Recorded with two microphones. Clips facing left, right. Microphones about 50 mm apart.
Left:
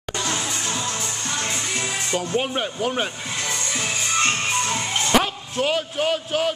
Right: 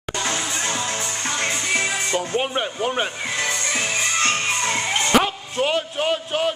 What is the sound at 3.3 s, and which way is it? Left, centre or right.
Music, right.